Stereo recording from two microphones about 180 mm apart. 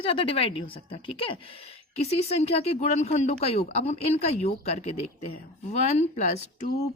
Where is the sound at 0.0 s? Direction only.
30° left (ahead or behind).